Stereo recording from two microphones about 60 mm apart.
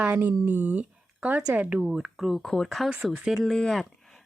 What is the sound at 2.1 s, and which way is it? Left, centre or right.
Speech, centre.